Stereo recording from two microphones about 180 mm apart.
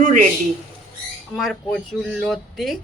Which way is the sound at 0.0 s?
45° right (ahead or behind).